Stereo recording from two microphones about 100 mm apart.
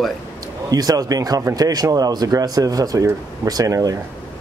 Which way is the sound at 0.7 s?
40° right (ahead or behind).